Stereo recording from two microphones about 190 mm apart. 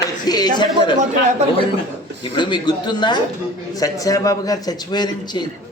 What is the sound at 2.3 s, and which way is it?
A man's voice, 25° left (ahead or behind).